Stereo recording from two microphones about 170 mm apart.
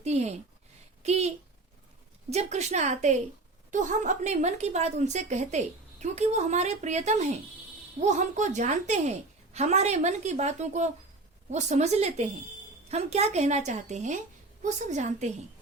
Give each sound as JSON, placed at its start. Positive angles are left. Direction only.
{"t": 0.0, "sound": "a sound", "side_deg": -40}
{"t": 1.0, "sound": "a woman's voice", "side_deg": -40}
{"t": 2.3, "sound": "a woman's voice", "side_deg": -40}